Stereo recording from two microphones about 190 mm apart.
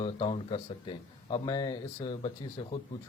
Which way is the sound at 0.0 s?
25° left (ahead or behind).